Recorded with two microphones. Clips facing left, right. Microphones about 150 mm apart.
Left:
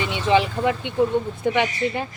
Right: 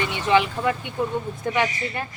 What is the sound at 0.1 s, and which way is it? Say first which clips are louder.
A woman's voice: left 2 dB; 25° left (ahead or behind).